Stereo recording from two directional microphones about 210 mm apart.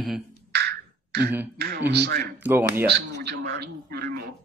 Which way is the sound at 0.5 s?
50° right (ahead or behind).